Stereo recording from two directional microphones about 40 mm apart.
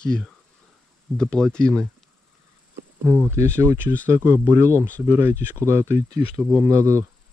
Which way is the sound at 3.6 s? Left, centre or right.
Right.